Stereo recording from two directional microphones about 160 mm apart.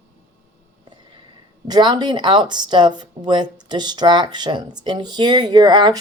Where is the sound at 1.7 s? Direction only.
25° right (ahead or behind).